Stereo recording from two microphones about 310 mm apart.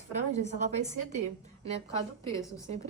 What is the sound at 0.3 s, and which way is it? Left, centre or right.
Speech, right.